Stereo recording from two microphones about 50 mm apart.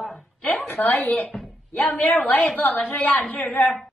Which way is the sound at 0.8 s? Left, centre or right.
Left.